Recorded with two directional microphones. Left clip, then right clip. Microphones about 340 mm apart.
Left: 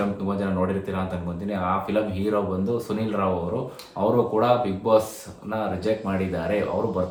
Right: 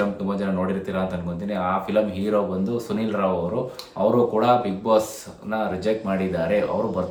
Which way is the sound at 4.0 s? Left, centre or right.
Centre.